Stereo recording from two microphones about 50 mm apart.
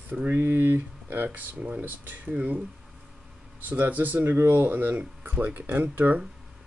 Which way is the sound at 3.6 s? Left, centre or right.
Right.